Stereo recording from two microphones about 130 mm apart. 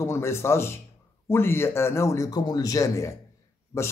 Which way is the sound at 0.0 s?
20° left (ahead or behind).